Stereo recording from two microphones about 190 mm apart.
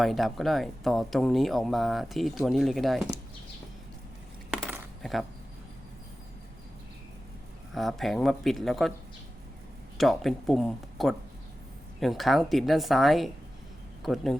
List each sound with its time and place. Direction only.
0.0 s speech: centre (ahead or behind)
7.7 s speech: centre (ahead or behind)
10.0 s speech: centre (ahead or behind)